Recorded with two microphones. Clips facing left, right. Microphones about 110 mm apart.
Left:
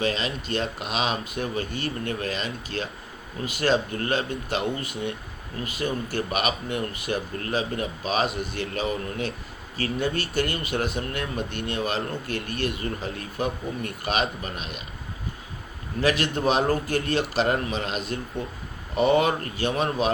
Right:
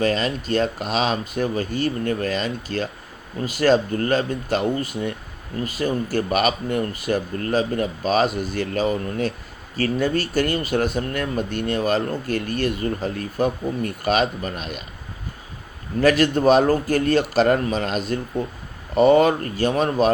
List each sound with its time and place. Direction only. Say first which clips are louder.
0.0 s speech: right 5 dB; 45° right (ahead or behind)
16.0 s a man's voice: right 7 dB; 45° right (ahead or behind)